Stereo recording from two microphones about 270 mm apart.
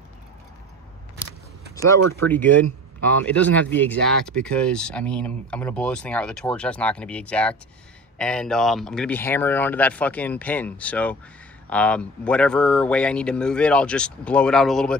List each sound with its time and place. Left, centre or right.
2.0 s speech: right
2.2 s speech: centre